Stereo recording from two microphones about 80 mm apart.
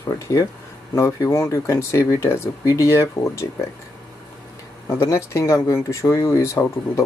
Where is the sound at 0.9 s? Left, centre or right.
Left.